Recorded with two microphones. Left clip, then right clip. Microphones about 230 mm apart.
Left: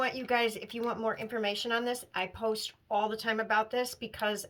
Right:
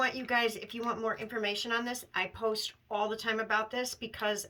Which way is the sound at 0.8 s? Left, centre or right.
Right.